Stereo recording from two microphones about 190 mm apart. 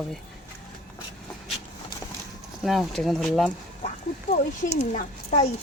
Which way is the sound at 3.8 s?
35° left (ahead or behind).